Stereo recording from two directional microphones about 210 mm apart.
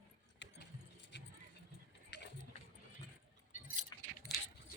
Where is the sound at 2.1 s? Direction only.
55° left (ahead or behind).